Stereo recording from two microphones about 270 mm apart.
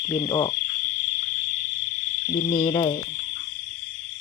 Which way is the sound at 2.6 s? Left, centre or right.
Centre.